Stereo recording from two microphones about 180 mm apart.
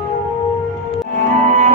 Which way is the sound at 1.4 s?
40° right (ahead or behind).